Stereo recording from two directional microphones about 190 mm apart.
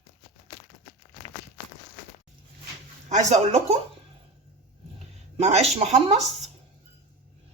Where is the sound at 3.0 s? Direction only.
35° right (ahead or behind).